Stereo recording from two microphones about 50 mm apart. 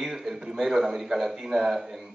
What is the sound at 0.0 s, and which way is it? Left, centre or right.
A man's voice, centre.